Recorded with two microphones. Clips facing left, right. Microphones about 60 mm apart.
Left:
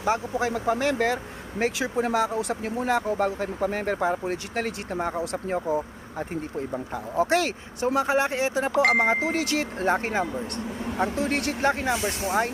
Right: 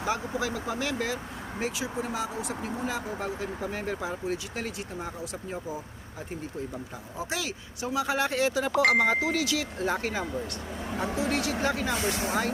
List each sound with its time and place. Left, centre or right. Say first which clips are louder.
0.0 s speech: left 5 dB; left
11.0 s speech: left 3 dB; left
11.7 s speech: left 3 dB; left